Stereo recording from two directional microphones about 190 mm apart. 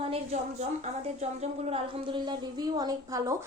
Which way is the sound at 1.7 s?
25° right (ahead or behind).